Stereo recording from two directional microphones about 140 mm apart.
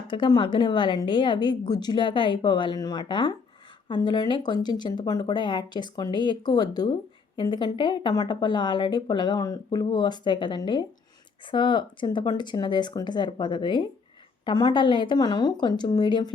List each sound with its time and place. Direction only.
0.1 s speech: 35° left (ahead or behind)